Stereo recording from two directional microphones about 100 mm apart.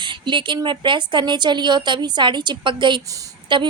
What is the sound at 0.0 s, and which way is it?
Speech, 55° right (ahead or behind).